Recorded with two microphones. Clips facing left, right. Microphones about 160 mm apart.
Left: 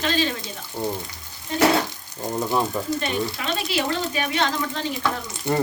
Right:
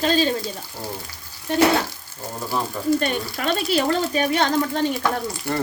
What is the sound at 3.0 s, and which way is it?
Speech, 45° right (ahead or behind).